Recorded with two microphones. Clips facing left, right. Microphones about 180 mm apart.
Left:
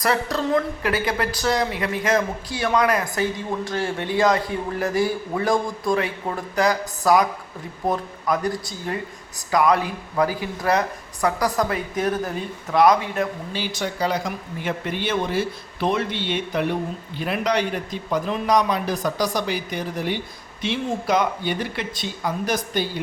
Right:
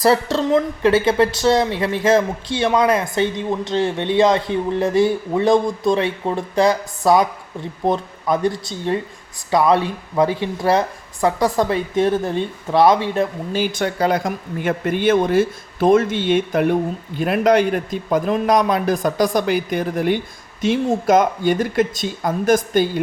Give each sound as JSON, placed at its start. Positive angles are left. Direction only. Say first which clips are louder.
{"t": 0.0, "sound": "speech", "louder": "right 6 dB", "side_deg": -30}
{"t": 13.5, "sound": "a man's voice", "louder": "right 7 dB", "side_deg": -50}